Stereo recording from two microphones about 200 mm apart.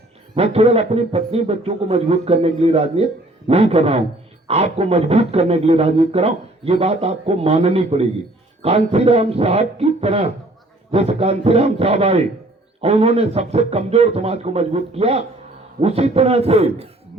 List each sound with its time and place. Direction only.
0.3 s a man's voice: 30° right (ahead or behind)